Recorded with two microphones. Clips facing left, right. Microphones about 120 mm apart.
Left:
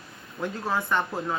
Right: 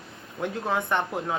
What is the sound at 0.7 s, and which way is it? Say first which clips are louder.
Speech: even; 20° right (ahead or behind).